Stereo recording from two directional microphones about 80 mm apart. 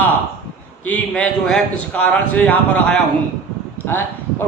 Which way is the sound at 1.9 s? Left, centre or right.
Centre.